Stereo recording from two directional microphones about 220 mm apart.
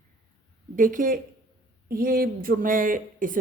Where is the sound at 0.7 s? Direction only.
35° right (ahead or behind).